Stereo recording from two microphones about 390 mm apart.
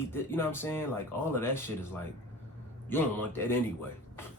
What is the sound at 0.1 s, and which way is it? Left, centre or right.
Speech, centre.